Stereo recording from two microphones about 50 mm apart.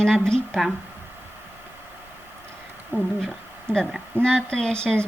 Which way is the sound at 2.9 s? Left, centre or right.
Right.